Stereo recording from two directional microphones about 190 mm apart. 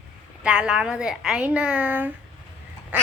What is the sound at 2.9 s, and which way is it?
Quack, 10° right (ahead or behind).